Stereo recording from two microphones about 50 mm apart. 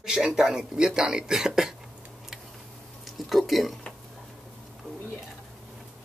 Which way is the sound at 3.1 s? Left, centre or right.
Centre.